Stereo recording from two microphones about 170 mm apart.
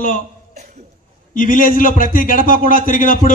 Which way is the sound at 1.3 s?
55° left (ahead or behind).